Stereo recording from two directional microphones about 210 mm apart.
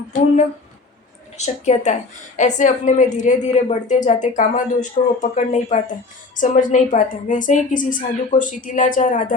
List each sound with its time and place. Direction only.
1.4 s a woman's voice: 35° left (ahead or behind)